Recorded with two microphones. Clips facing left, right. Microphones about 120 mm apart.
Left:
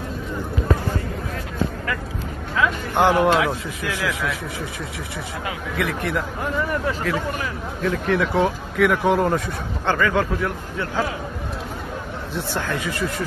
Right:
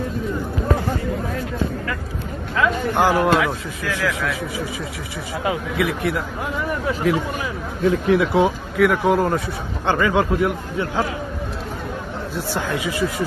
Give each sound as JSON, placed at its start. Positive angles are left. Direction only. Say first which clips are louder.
{"t": 2.5, "sound": "a man's voice", "louder": "right 2 dB", "side_deg": 0}
{"t": 5.8, "sound": "a man's voice", "louder": "left 2 dB", "side_deg": -5}
{"t": 9.8, "sound": "a man's voice", "louder": "right 2 dB", "side_deg": -15}
{"t": 12.5, "sound": "a man's voice", "louder": "right 2 dB", "side_deg": -10}